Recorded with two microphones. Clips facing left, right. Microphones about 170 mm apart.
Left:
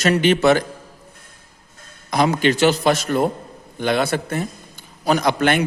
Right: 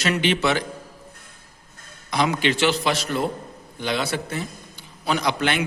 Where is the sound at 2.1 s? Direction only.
45° left (ahead or behind).